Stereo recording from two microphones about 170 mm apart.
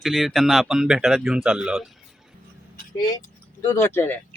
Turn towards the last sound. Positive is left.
turn(degrees=15)  # may be behind; listen again after turning